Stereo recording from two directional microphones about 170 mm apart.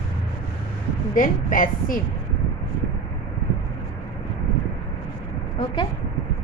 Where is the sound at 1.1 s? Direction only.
50° left (ahead or behind).